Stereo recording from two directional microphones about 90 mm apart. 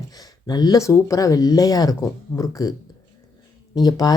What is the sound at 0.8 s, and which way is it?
Speech, 35° left (ahead or behind).